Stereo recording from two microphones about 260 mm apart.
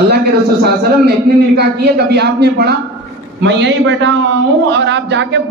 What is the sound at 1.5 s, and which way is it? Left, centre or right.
A man's voice, right.